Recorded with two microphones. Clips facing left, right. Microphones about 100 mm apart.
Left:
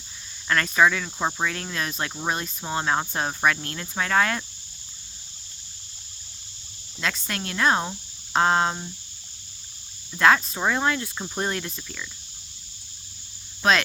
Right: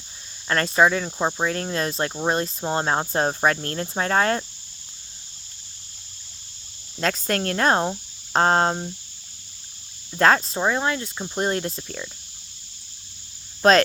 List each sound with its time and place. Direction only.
0.4 s cricket: 35° right (ahead or behind)
7.0 s speech: 40° right (ahead or behind)
10.2 s cricket: 40° right (ahead or behind)
10.7 s speech: 25° right (ahead or behind)
11.3 s cricket: 30° right (ahead or behind)
13.6 s speech: 40° right (ahead or behind)